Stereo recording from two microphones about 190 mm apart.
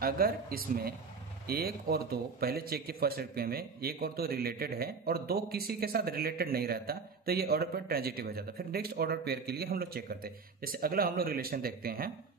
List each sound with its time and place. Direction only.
0.0 s a man's voice: 50° right (ahead or behind)